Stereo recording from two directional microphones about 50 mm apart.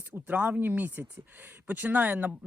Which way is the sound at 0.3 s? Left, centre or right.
Right.